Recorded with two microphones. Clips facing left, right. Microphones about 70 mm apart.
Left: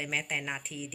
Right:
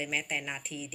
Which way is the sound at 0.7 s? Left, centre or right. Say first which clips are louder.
Even; right.